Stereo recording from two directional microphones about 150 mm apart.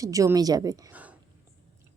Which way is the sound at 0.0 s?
20° right (ahead or behind).